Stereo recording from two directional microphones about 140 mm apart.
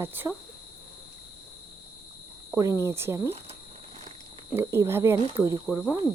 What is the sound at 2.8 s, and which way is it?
Speech, 20° right (ahead or behind).